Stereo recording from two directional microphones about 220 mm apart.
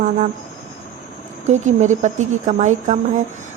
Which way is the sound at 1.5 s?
30° right (ahead or behind).